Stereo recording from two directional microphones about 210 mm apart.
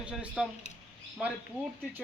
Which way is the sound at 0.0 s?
5° right (ahead or behind).